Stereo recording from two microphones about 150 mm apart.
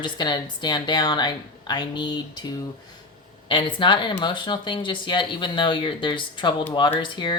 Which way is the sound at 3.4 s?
35° left (ahead or behind).